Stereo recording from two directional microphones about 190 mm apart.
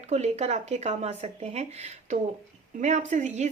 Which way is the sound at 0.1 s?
35° right (ahead or behind).